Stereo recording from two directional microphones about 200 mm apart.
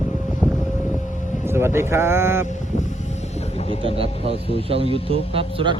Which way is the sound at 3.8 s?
30° right (ahead or behind).